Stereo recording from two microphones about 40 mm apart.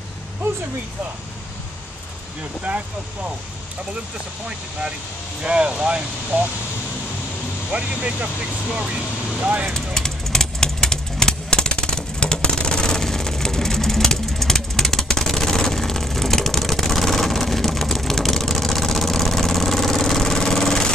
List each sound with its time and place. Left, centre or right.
2.7 s speech: right
5.4 s speech: right
6.3 s speech: right
7.7 s speech: right
9.4 s speech: right
9.8 s vehicle: centre